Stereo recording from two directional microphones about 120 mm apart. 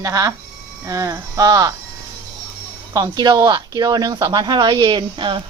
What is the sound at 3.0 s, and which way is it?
Speech, 35° right (ahead or behind).